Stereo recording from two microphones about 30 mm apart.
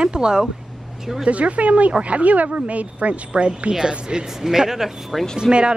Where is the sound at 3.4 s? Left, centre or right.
Right.